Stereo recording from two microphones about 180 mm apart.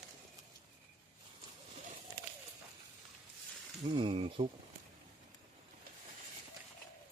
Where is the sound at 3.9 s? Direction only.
30° right (ahead or behind).